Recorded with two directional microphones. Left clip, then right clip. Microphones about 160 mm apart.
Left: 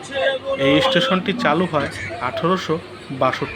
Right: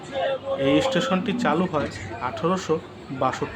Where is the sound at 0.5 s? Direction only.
20° left (ahead or behind).